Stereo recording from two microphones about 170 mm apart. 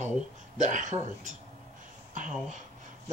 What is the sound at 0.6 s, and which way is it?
Speech, 45° right (ahead or behind).